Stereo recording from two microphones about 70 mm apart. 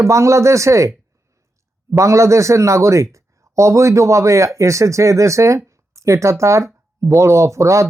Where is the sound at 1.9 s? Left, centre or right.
Right.